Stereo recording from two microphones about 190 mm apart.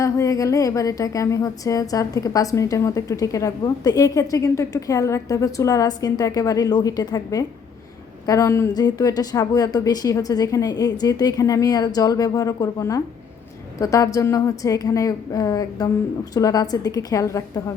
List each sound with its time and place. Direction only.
0.0 s a woman's voice: 15° left (ahead or behind)